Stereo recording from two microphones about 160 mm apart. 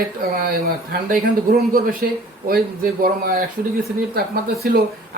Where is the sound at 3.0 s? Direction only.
65° right (ahead or behind).